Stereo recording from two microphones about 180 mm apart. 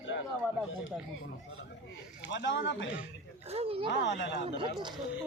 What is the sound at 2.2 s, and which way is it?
Speech, 80° left.